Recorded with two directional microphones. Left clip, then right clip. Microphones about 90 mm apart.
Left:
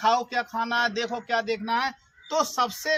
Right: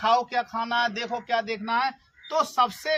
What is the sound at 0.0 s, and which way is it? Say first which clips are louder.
Speech: right 1 dB; 30° right (ahead or behind).